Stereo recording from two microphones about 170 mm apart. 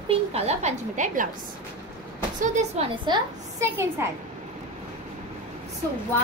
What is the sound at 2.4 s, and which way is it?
Speech, 45° right (ahead or behind).